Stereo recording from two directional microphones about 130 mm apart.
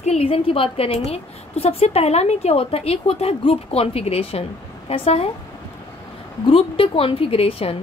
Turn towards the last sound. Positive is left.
turn(degrees=50)  # may be behind; listen again after turning